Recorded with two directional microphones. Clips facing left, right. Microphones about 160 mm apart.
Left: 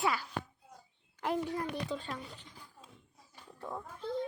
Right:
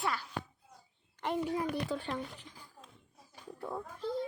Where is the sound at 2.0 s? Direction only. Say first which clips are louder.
Right 4 dB; 20° right (ahead or behind).